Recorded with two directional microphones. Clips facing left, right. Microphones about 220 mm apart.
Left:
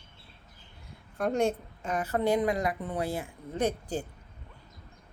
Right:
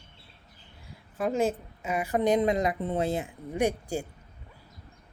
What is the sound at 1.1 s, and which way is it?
A woman's voice, 5° right (ahead or behind).